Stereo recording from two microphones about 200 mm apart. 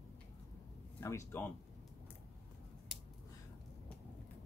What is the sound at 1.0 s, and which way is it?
Speech, 10° left (ahead or behind).